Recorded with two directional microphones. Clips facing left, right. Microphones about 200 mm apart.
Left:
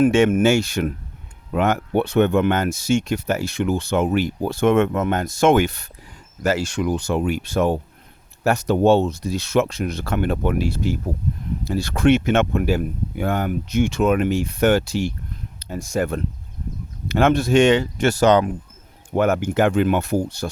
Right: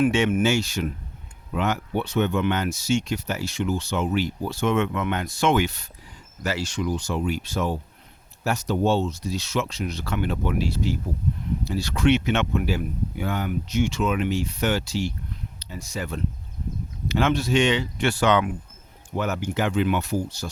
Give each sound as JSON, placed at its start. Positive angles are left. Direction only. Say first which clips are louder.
{"t": 0.0, "sound": "speech", "louder": "left 5 dB", "side_deg": 50}
{"t": 19.1, "sound": "speech", "louder": "left 8 dB", "side_deg": 55}